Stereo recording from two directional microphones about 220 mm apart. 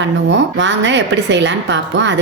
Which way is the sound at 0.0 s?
55° right (ahead or behind).